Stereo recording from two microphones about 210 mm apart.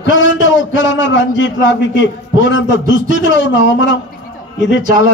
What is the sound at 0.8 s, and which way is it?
A man's voice, 60° left (ahead or behind).